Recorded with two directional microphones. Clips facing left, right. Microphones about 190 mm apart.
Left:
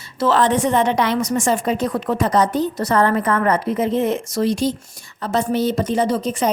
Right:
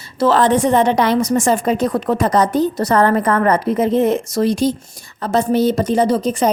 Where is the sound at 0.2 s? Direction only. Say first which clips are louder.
Right 3 dB; 35° right (ahead or behind).